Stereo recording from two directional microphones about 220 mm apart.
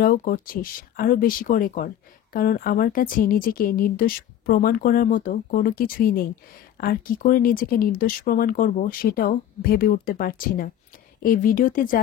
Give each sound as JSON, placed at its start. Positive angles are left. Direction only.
{"t": 0.0, "sound": "a woman's voice", "side_deg": 40}